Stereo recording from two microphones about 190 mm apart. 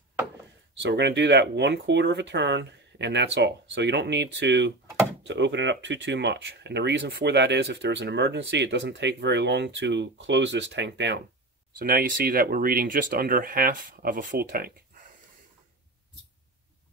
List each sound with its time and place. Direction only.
0.7 s speech: 65° right (ahead or behind)
11.8 s speech: 50° right (ahead or behind)